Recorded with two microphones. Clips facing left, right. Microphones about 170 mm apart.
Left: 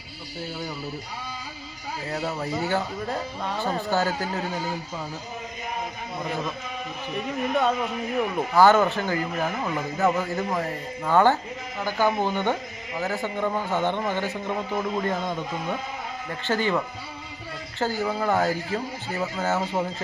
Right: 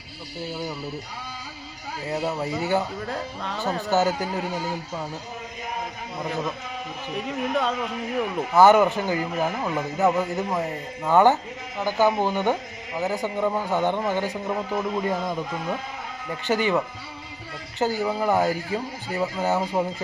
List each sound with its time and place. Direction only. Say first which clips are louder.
2.0 s speech: right 3 dB; 15° right (ahead or behind)
3.9 s speech: right 5 dB; 20° right (ahead or behind)
7.3 s a man's voice: left 1 dB; 5° left (ahead or behind)
8.5 s a man's voice: right 2 dB; 15° right (ahead or behind)
16.4 s speech: right 2 dB; 15° right (ahead or behind)